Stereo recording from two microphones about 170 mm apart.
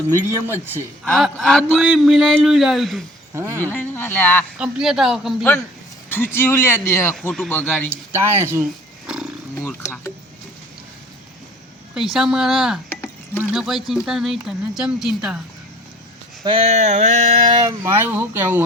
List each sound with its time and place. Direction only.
0.1 s speech: 15° right (ahead or behind)
1.0 s speech: centre (ahead or behind)
3.3 s speech: 15° right (ahead or behind)
3.6 s speech: 10° left (ahead or behind)
4.5 s speech: 5° right (ahead or behind)
6.1 s speech: 10° left (ahead or behind)
7.2 s speech: 5° left (ahead or behind)
7.9 s speech: 15° right (ahead or behind)
9.6 s speech: 10° left (ahead or behind)
11.9 s speech: centre (ahead or behind)
16.4 s a sound: 30° right (ahead or behind)
17.5 s speech: 20° right (ahead or behind)